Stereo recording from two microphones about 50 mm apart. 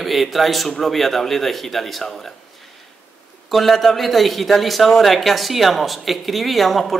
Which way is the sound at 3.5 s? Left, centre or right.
Centre.